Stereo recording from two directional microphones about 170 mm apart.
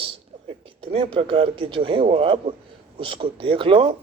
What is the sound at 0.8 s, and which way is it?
Speech, 30° right (ahead or behind).